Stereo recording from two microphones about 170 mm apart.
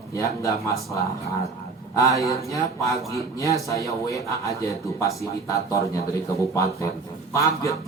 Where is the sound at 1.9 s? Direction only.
20° left (ahead or behind).